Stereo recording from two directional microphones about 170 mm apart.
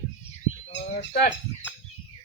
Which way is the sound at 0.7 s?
70° left (ahead or behind).